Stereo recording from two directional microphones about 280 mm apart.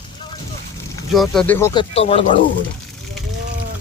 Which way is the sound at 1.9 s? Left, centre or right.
Left.